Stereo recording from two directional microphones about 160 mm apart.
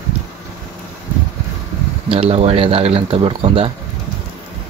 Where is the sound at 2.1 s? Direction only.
40° right (ahead or behind).